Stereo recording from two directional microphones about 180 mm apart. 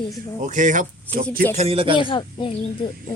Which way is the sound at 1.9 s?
30° left (ahead or behind).